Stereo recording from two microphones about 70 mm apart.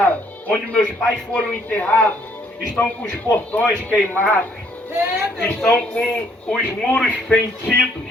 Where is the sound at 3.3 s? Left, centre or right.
Left.